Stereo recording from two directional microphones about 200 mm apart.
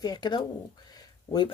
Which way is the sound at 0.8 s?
20° left (ahead or behind).